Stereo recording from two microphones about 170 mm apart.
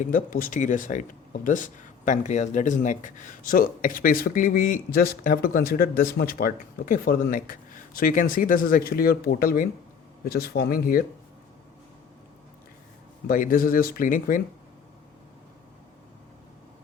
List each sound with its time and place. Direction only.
0.0 s speech: 50° left (ahead or behind)
13.2 s speech: 55° left (ahead or behind)